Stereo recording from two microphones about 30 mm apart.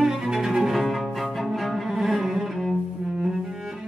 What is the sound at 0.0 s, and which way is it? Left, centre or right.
Cello, centre.